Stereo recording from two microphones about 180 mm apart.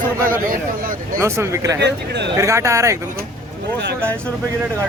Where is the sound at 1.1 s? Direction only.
15° right (ahead or behind).